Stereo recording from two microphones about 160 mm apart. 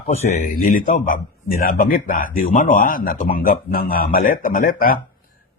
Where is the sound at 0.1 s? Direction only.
45° left (ahead or behind).